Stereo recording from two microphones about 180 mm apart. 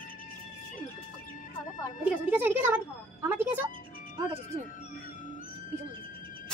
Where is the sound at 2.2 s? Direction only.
10° right (ahead or behind).